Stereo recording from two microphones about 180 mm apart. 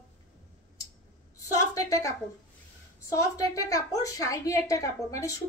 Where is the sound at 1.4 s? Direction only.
20° left (ahead or behind).